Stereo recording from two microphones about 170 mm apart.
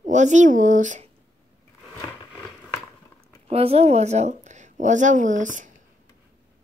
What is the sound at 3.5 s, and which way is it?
Speech, 35° right (ahead or behind).